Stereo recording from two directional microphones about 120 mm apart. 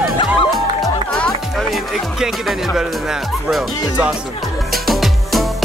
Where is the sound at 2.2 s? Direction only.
5° right (ahead or behind).